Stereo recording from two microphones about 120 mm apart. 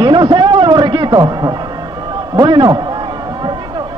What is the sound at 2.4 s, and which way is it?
Speech, 35° right (ahead or behind).